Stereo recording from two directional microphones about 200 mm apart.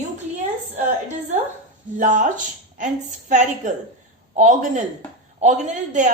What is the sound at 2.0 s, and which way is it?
A woman's voice, 40° right (ahead or behind).